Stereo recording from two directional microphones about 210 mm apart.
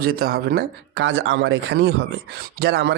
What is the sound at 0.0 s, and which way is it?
Speech, 45° right (ahead or behind).